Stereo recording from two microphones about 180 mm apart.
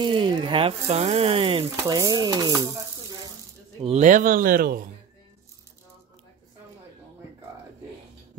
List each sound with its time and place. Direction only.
0.0 s speech: 25° right (ahead or behind)
3.8 s speech: 40° right (ahead or behind)